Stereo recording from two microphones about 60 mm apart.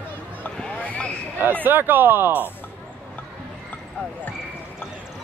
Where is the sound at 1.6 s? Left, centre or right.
Right.